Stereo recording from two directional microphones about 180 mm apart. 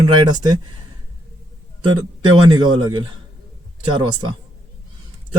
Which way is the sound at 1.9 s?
25° right (ahead or behind).